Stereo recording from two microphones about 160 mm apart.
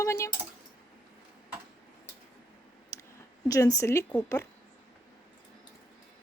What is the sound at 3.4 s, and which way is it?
Speech, 20° left (ahead or behind).